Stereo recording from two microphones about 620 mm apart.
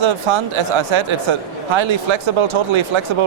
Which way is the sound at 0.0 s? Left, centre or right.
Right.